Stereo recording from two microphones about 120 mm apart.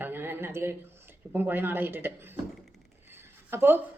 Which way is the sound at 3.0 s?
20° right (ahead or behind).